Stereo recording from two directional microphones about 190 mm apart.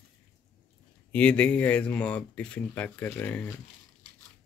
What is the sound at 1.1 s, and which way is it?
Speech, 5° left (ahead or behind).